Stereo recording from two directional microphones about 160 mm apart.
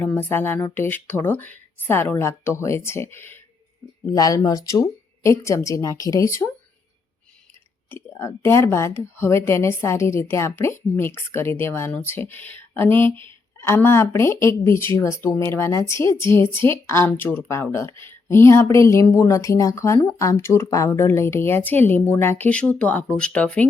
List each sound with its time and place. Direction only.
0.0 s a woman's voice: 15° left (ahead or behind)
7.9 s a woman's voice: 15° left (ahead or behind)